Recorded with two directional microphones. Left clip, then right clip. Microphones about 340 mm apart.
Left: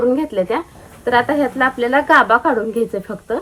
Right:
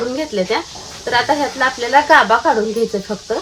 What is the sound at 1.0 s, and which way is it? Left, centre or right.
Speech, centre.